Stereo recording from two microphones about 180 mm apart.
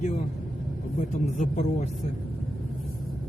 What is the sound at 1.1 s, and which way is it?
Speech, 40° left (ahead or behind).